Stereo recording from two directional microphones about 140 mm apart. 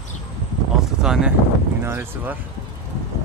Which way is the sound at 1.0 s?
5° right (ahead or behind).